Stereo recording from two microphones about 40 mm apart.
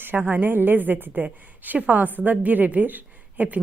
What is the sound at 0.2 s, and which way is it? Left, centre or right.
A woman's voice, right.